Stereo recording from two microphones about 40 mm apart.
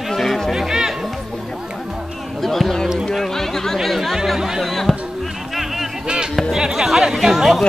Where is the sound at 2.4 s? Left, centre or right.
Centre.